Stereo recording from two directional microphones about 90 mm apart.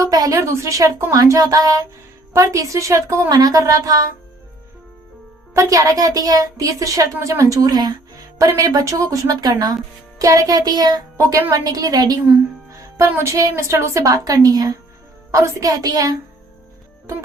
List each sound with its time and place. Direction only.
0.0 s a sound: 40° right (ahead or behind)
1.1 s a woman's voice: 40° right (ahead or behind)
3.2 s music: 45° right (ahead or behind)
5.5 s a woman's voice: 40° right (ahead or behind)
10.2 s music: 40° right (ahead or behind)
13.1 s a woman's voice: 30° right (ahead or behind)